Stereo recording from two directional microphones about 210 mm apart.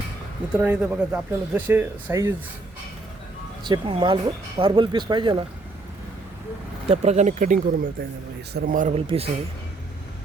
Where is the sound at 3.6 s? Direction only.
20° right (ahead or behind).